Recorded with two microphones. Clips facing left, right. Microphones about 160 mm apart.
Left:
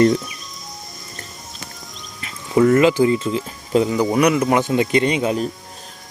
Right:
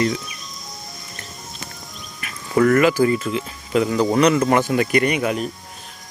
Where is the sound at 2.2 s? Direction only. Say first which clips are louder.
Left 2 dB; 20° left (ahead or behind).